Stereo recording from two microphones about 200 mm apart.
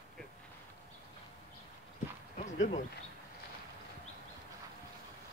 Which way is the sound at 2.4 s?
40° left (ahead or behind).